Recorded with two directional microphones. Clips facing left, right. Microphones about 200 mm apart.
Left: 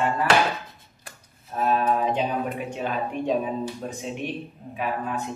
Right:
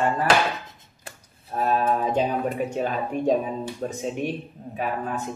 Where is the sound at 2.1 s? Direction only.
45° right (ahead or behind).